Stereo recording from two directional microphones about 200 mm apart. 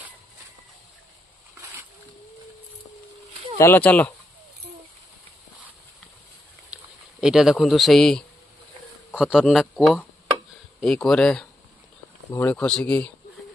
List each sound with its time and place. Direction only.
3.5 s speech: 10° left (ahead or behind)
6.7 s speech: 5° right (ahead or behind)